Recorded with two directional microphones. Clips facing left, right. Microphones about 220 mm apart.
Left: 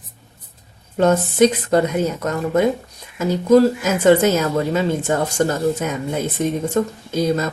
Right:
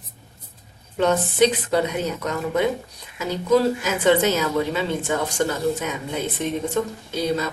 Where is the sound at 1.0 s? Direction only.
45° left (ahead or behind).